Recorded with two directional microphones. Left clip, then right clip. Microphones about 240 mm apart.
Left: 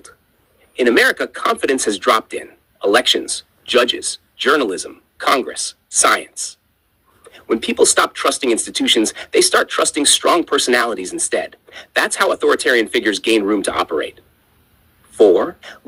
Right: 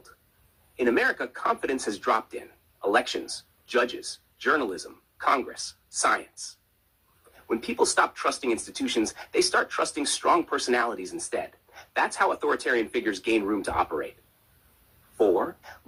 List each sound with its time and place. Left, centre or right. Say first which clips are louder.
0.8 s speech: left 11 dB; left
15.2 s speech: left 11 dB; left